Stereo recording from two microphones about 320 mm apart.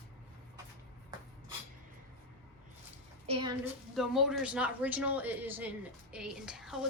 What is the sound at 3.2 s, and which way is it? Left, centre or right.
Speech, centre.